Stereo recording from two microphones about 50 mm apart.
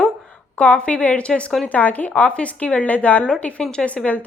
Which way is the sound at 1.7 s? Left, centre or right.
Left.